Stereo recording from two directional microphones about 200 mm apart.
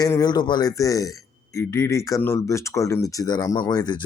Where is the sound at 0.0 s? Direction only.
20° left (ahead or behind).